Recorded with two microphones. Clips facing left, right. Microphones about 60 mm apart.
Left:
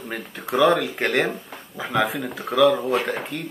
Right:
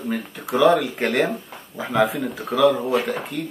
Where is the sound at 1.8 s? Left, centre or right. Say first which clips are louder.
Right 3 dB; centre.